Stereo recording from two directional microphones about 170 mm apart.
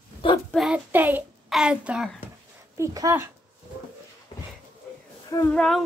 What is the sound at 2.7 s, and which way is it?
Speech, 20° right (ahead or behind).